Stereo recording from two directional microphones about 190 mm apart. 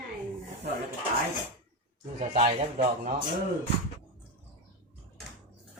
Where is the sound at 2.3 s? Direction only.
40° right (ahead or behind).